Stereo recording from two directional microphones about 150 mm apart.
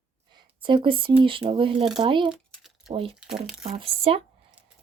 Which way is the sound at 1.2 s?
35° right (ahead or behind).